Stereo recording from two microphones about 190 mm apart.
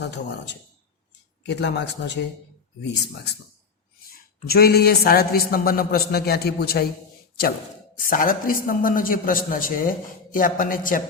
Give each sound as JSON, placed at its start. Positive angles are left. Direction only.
{"t": 0.0, "sound": "speech", "side_deg": 65}
{"t": 4.4, "sound": "a man's voice", "side_deg": 55}
{"t": 8.1, "sound": "a man's voice", "side_deg": 45}